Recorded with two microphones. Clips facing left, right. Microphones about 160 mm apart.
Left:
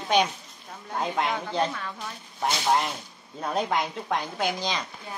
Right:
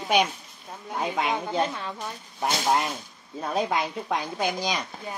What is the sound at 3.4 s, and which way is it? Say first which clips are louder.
Speech: right 1 dB; 5° right (ahead or behind).